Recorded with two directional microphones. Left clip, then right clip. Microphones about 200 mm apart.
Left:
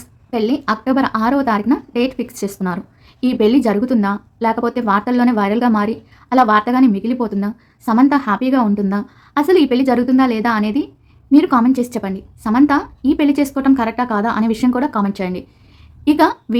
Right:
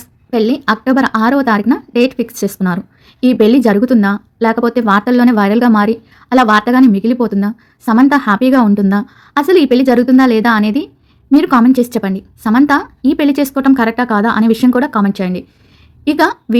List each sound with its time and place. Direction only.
0.0 s speech: 20° right (ahead or behind)